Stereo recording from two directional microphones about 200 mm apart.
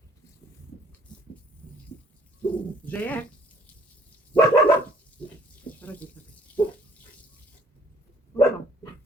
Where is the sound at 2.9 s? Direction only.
10° left (ahead or behind).